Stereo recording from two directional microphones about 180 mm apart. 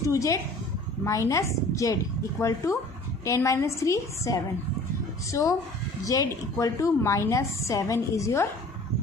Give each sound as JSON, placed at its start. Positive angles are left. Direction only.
{"t": 0.1, "sound": "a woman's voice", "side_deg": 15}